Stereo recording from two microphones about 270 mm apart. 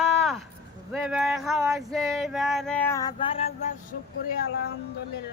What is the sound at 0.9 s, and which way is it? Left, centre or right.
Male singing, centre.